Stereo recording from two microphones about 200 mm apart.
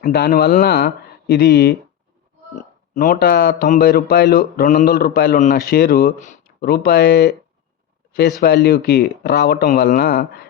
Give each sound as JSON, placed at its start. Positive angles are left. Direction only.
{"t": 0.0, "sound": "speech", "side_deg": 50}
{"t": 2.6, "sound": "speech", "side_deg": 40}
{"t": 8.4, "sound": "speech", "side_deg": 50}